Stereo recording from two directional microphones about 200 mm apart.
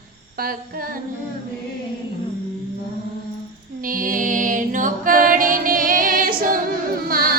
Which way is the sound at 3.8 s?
45° right (ahead or behind).